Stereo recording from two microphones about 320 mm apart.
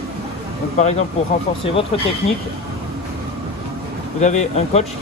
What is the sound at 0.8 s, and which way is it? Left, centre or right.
Speech, left.